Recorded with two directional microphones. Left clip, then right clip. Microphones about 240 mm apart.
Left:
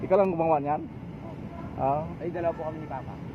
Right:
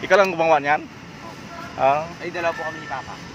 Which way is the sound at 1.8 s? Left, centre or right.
Right.